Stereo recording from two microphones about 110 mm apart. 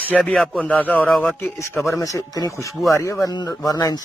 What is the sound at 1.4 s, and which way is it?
Speech, 25° left (ahead or behind).